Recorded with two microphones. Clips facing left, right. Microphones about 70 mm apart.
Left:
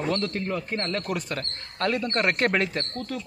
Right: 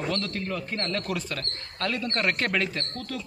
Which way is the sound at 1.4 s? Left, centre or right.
Left.